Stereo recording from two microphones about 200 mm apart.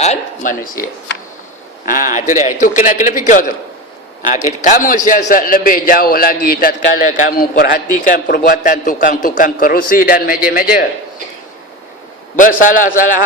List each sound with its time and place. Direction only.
0.0 s a sound: 35° left (ahead or behind)
1.8 s a man's voice: 40° left (ahead or behind)
4.6 s a man's voice: 40° left (ahead or behind)
12.4 s a man's voice: 40° left (ahead or behind)